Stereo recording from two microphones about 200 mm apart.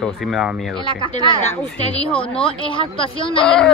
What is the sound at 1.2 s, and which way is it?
Speech, 30° left (ahead or behind).